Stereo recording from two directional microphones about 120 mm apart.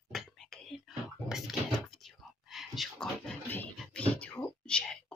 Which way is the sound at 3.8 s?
10° left (ahead or behind).